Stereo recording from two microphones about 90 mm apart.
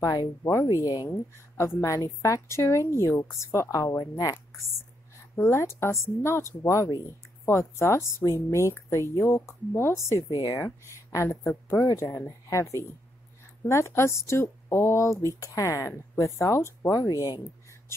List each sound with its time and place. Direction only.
0.0 s a woman's voice: 40° left (ahead or behind)
0.8 s speech: 50° left (ahead or behind)
1.6 s a woman's voice: 35° left (ahead or behind)
5.3 s a woman's voice: 30° left (ahead or behind)